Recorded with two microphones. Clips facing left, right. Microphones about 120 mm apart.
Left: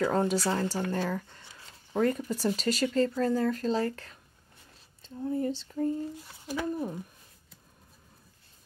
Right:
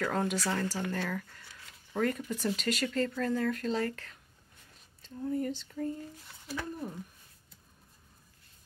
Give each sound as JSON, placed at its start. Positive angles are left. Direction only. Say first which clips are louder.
{"t": 0.0, "sound": "speech", "louder": "left 5 dB", "side_deg": 25}
{"t": 6.4, "sound": "speech", "louder": "left 6 dB", "side_deg": 15}